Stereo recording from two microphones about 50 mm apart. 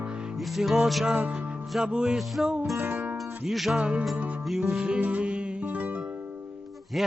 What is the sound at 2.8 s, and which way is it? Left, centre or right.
Music, right.